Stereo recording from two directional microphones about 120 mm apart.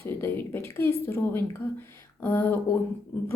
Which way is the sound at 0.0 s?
20° left (ahead or behind).